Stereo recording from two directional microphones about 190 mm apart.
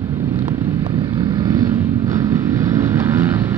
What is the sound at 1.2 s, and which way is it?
Vehicle, 20° right (ahead or behind).